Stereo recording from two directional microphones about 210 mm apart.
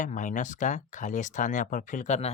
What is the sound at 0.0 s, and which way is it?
Speech, 40° left (ahead or behind).